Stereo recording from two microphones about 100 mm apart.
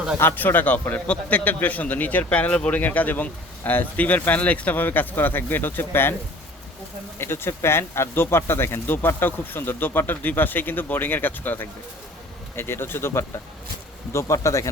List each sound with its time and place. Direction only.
0.2 s a man's voice: 20° left (ahead or behind)
7.2 s speech: 25° left (ahead or behind)